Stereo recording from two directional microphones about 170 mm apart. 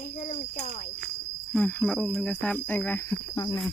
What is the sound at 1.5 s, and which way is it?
Speech, 10° left (ahead or behind).